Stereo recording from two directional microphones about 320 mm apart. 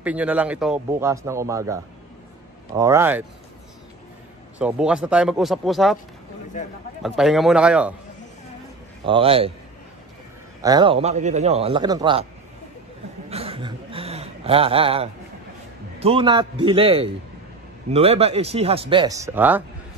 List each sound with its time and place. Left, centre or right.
0.0 s a man's voice: centre
4.6 s speech: centre
6.5 s a man's voice: left
7.0 s speech: centre
9.0 s a man's voice: centre
10.6 s a man's voice: centre
13.3 s a sound: centre
16.0 s a man's voice: centre